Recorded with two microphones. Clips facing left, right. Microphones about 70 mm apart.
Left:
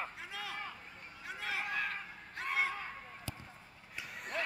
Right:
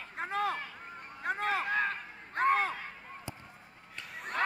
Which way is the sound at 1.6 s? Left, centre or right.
Right.